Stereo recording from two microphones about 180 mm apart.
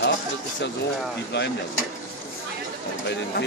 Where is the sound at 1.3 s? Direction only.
75° left (ahead or behind).